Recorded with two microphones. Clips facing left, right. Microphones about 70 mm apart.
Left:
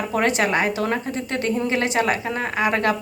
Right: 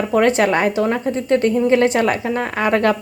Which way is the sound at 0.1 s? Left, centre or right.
Right.